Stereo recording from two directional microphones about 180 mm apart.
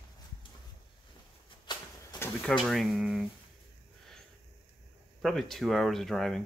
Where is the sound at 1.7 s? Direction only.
25° left (ahead or behind).